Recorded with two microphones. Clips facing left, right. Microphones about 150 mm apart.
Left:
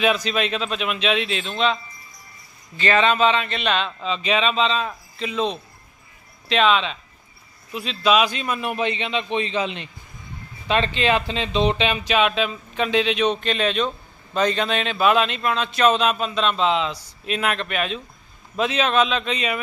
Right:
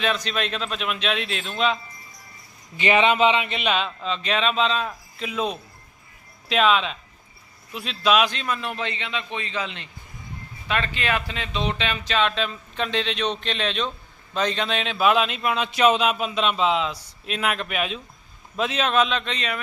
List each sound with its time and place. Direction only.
0.0 s speech: 5° left (ahead or behind)
2.7 s speech: 15° right (ahead or behind); by 19.5 s 5° left (ahead or behind)